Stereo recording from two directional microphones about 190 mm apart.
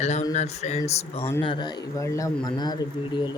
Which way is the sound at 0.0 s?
40° left (ahead or behind).